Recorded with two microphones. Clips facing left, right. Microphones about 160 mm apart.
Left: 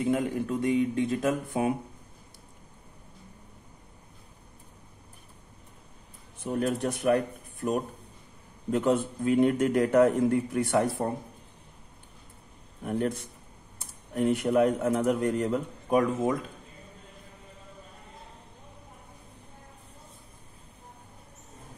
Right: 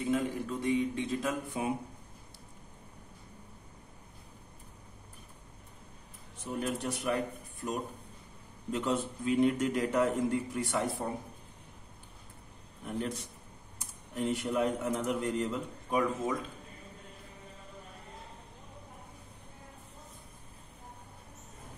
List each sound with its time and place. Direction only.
0.1 s speech: 50° left (ahead or behind)
6.4 s a man's voice: 60° left (ahead or behind)
8.7 s a man's voice: 55° left (ahead or behind)
14.1 s a man's voice: 60° left (ahead or behind)